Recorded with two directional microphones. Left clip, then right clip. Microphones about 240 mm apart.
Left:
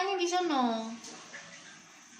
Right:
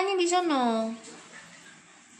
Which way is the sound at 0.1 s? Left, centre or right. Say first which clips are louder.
Right 5 dB; right.